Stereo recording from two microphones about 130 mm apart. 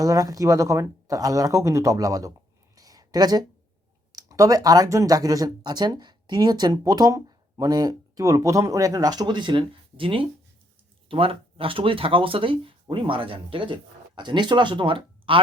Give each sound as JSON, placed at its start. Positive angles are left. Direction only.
{"t": 0.0, "sound": "speech", "side_deg": -25}
{"t": 2.7, "sound": "a sound", "side_deg": -30}
{"t": 4.1, "sound": "speech", "side_deg": -25}